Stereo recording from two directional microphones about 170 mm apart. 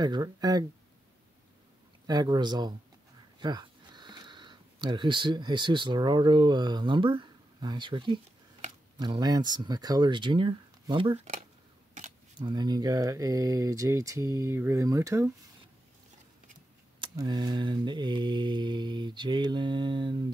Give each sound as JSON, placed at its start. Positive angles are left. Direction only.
{"t": 0.0, "sound": "mantra", "side_deg": -25}
{"t": 2.0, "sound": "mantra", "side_deg": -25}
{"t": 3.3, "sound": "speech", "side_deg": -25}
{"t": 8.9, "sound": "mantra", "side_deg": -25}
{"t": 12.4, "sound": "mantra", "side_deg": -25}
{"t": 17.0, "sound": "mantra", "side_deg": -25}